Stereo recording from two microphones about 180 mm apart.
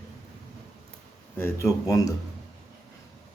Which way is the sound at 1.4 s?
15° left (ahead or behind).